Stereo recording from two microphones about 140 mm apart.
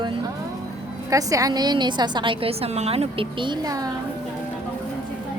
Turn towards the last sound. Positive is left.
turn(degrees=-25)  # may be behind; listen again after turning